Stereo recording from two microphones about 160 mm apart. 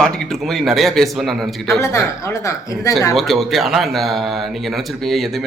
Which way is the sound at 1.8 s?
20° left (ahead or behind).